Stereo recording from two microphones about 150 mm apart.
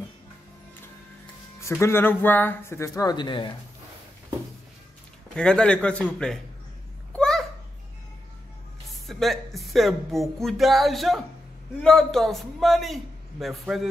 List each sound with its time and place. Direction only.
1.6 s speech: 20° left (ahead or behind)
5.3 s speech: 5° left (ahead or behind)
7.1 s babbling: 5° left (ahead or behind)
8.8 s speech: centre (ahead or behind)